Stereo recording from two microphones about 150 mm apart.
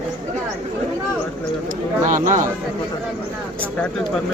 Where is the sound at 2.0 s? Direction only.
60° right (ahead or behind).